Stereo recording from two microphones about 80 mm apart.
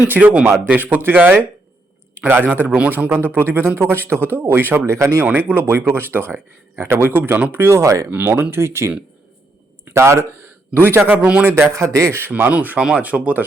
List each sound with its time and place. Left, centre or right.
0.1 s speech: centre; by 5.2 s right
5.2 s speech: right
8.1 s a man's voice: right
10.8 s a man's voice: right
12.3 s speech: centre